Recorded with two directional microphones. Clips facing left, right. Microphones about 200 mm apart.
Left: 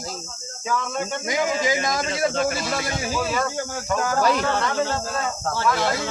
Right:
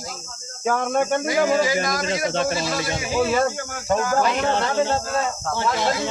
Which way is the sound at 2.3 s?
30° right (ahead or behind).